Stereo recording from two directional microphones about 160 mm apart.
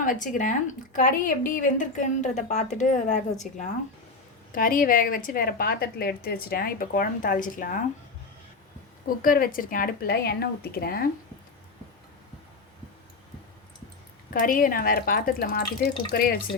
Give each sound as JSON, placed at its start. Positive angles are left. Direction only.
{"t": 0.0, "sound": "a woman's voice", "side_deg": 55}
{"t": 4.5, "sound": "a woman's voice", "side_deg": 60}
{"t": 9.0, "sound": "a woman's voice", "side_deg": 60}
{"t": 14.3, "sound": "a woman's voice", "side_deg": 60}